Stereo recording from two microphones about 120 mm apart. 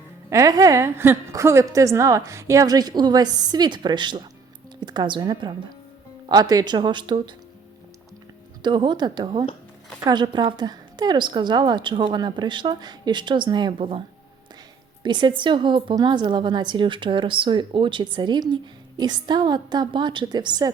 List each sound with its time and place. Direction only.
0.3 s a woman's voice: 30° right (ahead or behind)
8.6 s a woman's voice: 40° right (ahead or behind)
15.0 s a woman's voice: 40° right (ahead or behind)